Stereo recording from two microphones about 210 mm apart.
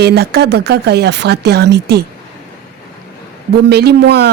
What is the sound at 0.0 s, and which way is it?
Speech, 50° right (ahead or behind).